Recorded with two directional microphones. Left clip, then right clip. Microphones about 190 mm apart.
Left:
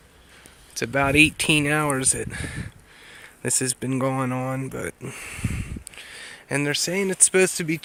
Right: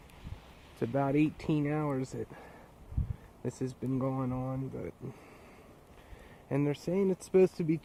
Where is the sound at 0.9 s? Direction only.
30° left (ahead or behind).